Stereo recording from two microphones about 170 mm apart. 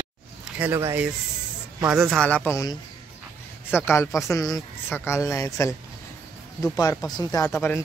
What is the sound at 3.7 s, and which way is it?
Speech, 15° left (ahead or behind).